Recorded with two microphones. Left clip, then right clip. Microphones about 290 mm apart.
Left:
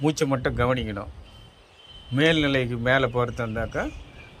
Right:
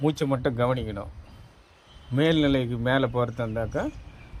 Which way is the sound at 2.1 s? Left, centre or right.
Centre.